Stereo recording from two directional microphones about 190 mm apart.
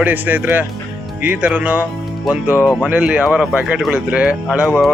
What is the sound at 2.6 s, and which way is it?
Speech, 10° left (ahead or behind).